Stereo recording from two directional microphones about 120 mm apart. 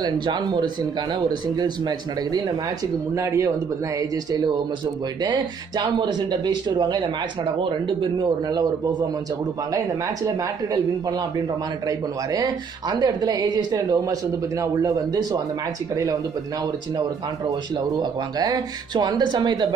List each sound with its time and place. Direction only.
0.0 s a man's voice: 35° right (ahead or behind)
5.2 s speech: 40° right (ahead or behind)
9.8 s speech: 30° right (ahead or behind)
13.0 s a man's voice: 35° right (ahead or behind)
17.5 s speech: 35° right (ahead or behind)